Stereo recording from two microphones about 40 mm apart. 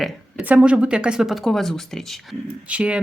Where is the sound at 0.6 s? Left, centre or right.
Right.